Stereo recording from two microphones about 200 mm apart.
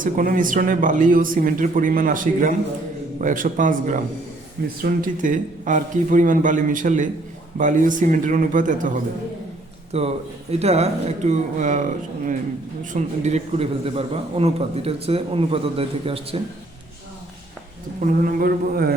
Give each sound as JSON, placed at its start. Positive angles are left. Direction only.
{"t": 0.0, "sound": "speech", "side_deg": -45}
{"t": 9.9, "sound": "a man's voice", "side_deg": -30}
{"t": 18.0, "sound": "speech", "side_deg": -45}